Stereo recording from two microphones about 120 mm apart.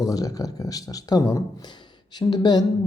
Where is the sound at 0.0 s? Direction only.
30° left (ahead or behind).